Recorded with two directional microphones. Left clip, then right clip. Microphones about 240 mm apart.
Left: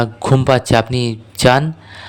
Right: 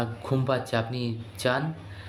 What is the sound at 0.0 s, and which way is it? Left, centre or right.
A man's voice, left.